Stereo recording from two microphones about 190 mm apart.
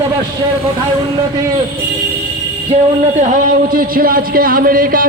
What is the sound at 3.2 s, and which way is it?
A man's voice, 45° right (ahead or behind).